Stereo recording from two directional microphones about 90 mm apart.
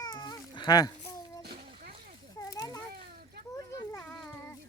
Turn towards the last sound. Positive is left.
turn(degrees=35)  # may be behind; listen again after turning